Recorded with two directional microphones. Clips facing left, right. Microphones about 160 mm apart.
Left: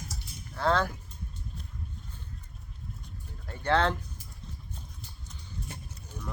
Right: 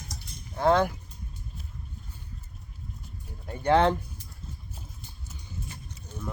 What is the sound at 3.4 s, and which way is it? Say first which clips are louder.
Speech: right 5 dB; 15° right (ahead or behind).